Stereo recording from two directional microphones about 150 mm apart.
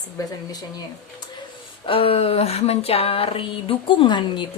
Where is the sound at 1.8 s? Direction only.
40° left (ahead or behind).